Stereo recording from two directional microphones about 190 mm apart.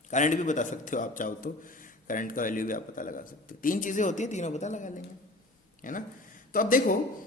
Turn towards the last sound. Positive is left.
turn(degrees=45)  # may be behind; listen again after turning